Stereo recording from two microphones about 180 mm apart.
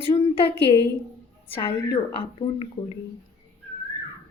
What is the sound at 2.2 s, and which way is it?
Speech, 30° left (ahead or behind).